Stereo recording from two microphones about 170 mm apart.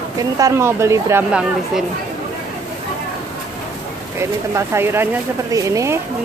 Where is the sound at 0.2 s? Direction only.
20° right (ahead or behind).